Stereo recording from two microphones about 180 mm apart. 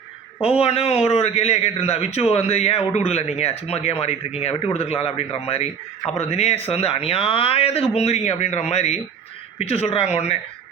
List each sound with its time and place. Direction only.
0.4 s a man's voice: 35° left (ahead or behind)